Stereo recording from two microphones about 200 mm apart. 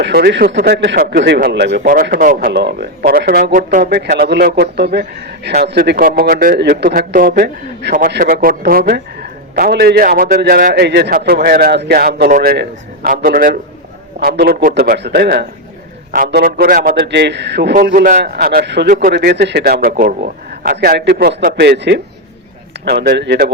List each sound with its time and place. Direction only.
0.0 s a man's voice: 55° right (ahead or behind)
1.9 s speech: 45° right (ahead or behind)
2.5 s speech: 60° right (ahead or behind)
8.2 s a man's voice: 45° right (ahead or behind)
17.9 s a man's voice: 45° right (ahead or behind)